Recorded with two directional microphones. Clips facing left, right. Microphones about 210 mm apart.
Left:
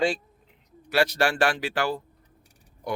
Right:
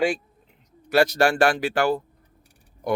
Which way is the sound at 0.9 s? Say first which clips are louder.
Right 4 dB; 45° right (ahead or behind).